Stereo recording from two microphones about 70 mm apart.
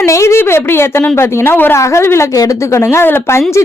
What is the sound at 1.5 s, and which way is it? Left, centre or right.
Speech, left.